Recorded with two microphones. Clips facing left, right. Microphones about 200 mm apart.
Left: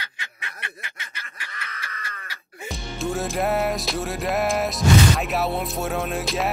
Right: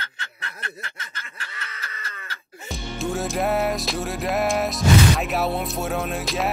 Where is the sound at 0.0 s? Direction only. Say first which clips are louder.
Right 2 dB; 15° left (ahead or behind).